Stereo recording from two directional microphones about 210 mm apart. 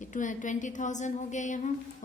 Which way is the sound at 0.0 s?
35° left (ahead or behind).